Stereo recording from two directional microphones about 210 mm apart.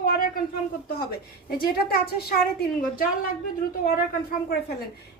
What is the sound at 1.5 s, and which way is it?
Speech, 45° left (ahead or behind).